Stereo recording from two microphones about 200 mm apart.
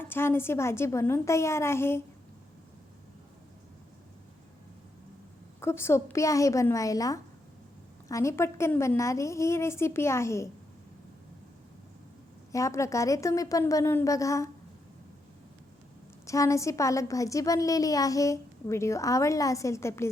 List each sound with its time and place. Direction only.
0.0 s a woman's voice: 10° left (ahead or behind)
5.5 s a woman's voice: 10° left (ahead or behind)
12.5 s a woman's voice: 15° left (ahead or behind)
16.2 s a woman's voice: 15° left (ahead or behind)